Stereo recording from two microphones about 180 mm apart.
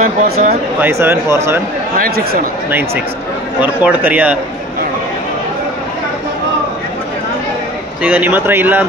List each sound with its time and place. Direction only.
0.0 s speech: 55° right (ahead or behind)
0.7 s speech: 10° right (ahead or behind)
2.0 s a man's voice: 55° right (ahead or behind)
3.6 s speech: 10° right (ahead or behind)
8.0 s speech: 10° right (ahead or behind)